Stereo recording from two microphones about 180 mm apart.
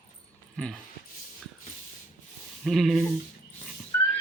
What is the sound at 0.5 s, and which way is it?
Speech, centre (ahead or behind).